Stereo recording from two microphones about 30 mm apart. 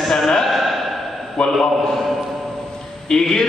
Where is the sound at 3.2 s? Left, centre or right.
Centre.